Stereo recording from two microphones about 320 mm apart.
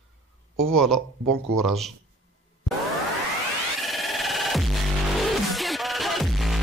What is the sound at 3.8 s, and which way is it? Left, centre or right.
Music, centre.